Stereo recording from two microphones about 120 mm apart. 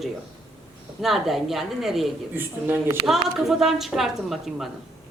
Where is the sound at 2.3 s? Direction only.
15° right (ahead or behind).